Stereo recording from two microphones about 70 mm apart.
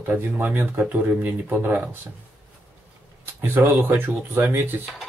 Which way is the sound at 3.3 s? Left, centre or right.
Right.